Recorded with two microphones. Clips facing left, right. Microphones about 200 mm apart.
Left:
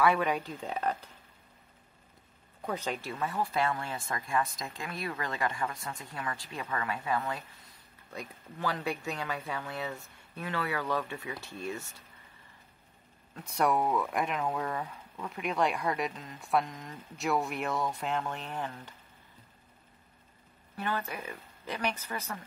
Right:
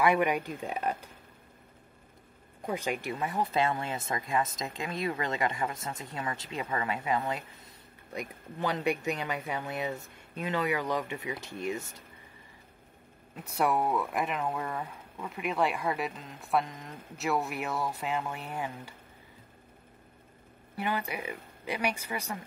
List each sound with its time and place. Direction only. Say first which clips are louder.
0.0 s speech: right 1 dB; 15° right (ahead or behind)
2.6 s speech: right 2 dB; 10° right (ahead or behind)
13.3 s speech: even; 5° right (ahead or behind)
20.7 s speech: right 2 dB; 15° right (ahead or behind)